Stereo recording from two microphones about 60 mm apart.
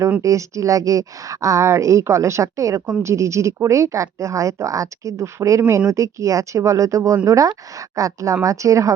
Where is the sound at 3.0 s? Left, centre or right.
Right.